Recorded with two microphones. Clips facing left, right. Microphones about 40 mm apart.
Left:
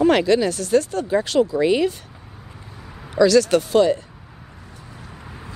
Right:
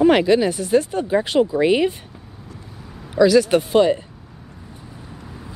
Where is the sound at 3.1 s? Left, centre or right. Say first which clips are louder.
Right 1 dB; centre.